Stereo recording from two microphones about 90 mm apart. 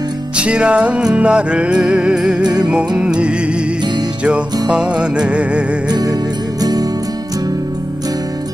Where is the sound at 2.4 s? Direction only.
50° right (ahead or behind).